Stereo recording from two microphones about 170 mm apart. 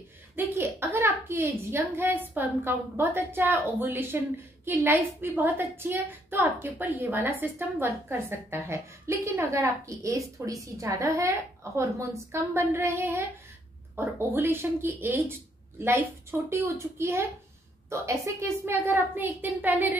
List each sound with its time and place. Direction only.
0.4 s a woman's voice: 15° right (ahead or behind)